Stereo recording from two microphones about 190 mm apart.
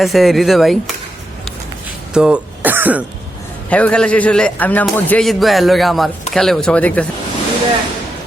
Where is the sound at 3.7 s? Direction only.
5° left (ahead or behind).